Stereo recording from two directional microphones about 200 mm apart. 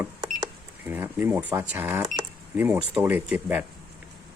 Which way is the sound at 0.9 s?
10° right (ahead or behind).